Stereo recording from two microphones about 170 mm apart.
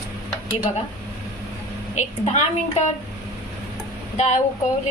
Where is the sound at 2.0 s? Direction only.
40° left (ahead or behind).